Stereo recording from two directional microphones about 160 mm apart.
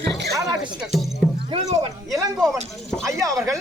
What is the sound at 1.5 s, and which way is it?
Speech, 25° right (ahead or behind).